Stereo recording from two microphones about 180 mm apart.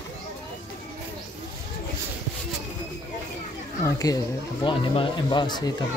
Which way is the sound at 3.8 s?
20° left (ahead or behind).